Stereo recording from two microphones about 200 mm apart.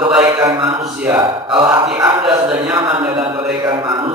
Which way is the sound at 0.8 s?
10° right (ahead or behind).